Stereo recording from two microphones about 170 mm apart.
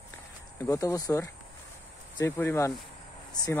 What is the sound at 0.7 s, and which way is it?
Speech, 20° left (ahead or behind).